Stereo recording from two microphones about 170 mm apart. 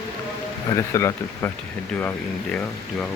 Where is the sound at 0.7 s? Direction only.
20° left (ahead or behind).